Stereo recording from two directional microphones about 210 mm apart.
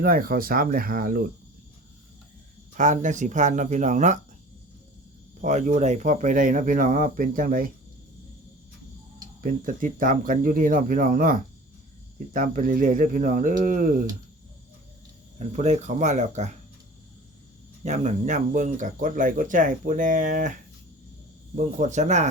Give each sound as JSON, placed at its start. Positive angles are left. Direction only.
{"t": 0.0, "sound": "speech", "side_deg": -45}
{"t": 2.7, "sound": "speech", "side_deg": -35}
{"t": 5.4, "sound": "speech", "side_deg": -35}
{"t": 9.4, "sound": "speech", "side_deg": -40}
{"t": 15.4, "sound": "speech", "side_deg": -30}
{"t": 17.8, "sound": "speech", "side_deg": -35}